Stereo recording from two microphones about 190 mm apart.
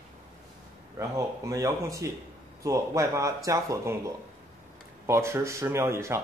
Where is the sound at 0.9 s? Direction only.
15° right (ahead or behind).